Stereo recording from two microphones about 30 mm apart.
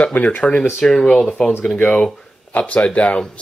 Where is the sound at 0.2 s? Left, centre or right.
Left.